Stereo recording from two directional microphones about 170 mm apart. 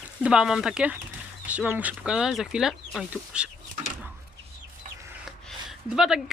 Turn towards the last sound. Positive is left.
turn(degrees=-5)  # may be behind; listen again after turning